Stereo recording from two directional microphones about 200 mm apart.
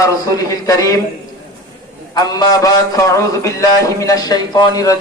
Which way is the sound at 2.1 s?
20° left (ahead or behind).